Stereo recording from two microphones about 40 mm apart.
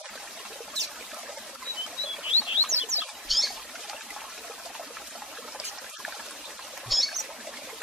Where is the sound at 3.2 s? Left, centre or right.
Centre.